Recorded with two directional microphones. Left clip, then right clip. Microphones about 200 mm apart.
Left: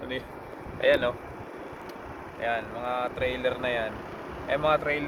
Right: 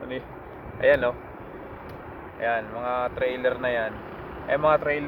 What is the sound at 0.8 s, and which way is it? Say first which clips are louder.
Speech: right 3 dB; 25° right (ahead or behind).